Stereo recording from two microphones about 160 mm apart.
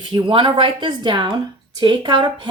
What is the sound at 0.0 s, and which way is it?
Speech, 30° right (ahead or behind).